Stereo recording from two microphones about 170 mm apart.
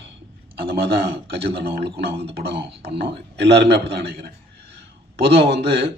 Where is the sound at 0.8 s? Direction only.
70° right (ahead or behind).